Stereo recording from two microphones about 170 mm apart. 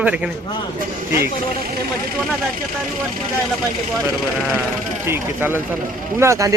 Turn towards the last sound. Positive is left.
turn(degrees=-20)  # may be behind; listen again after turning